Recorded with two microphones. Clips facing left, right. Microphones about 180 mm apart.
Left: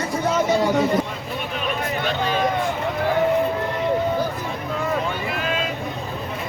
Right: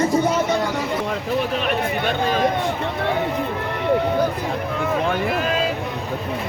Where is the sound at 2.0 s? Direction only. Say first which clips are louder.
Right 1 dB; 45° right (ahead or behind).